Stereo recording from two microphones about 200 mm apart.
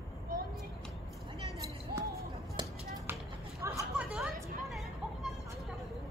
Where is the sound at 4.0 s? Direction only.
5° right (ahead or behind).